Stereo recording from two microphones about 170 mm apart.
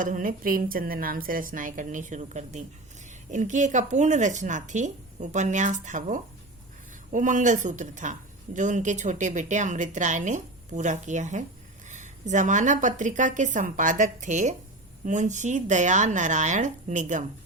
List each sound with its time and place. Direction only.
0.0 s a woman's voice: 55° right (ahead or behind)